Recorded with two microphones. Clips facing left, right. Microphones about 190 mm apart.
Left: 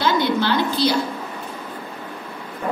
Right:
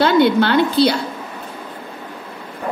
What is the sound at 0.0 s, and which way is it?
Speech, 60° right (ahead or behind).